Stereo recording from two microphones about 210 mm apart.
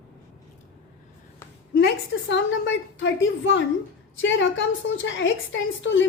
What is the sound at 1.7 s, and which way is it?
A woman's voice, 55° left (ahead or behind).